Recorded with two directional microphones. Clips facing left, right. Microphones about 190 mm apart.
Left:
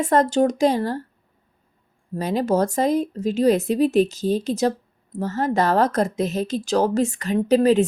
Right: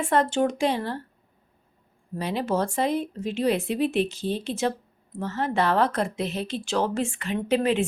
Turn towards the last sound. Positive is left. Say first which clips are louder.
# left 7 dB
turn(degrees=40)  # may be behind; listen again after turning